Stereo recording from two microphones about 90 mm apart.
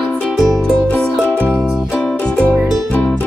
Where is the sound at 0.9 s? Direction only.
15° left (ahead or behind).